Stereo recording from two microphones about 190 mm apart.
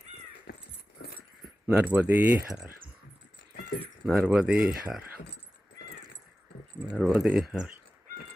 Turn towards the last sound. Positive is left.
turn(degrees=0)  # may be behind; listen again after turning